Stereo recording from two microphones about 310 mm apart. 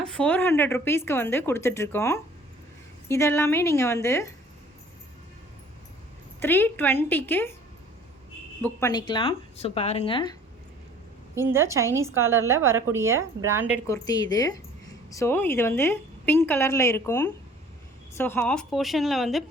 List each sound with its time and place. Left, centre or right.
0.0 s a woman's voice: centre
6.4 s a woman's voice: centre
8.6 s a woman's voice: centre
11.3 s a woman's voice: centre
13.8 s a woman's voice: centre